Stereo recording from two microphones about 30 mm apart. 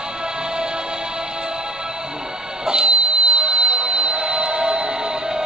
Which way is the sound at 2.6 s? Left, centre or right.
Right.